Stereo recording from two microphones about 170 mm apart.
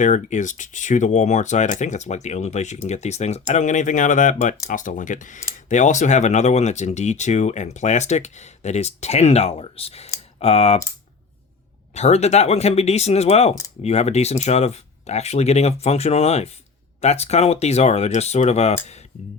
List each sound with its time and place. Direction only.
0.0 s speech: 45° left (ahead or behind)
11.9 s speech: 40° left (ahead or behind)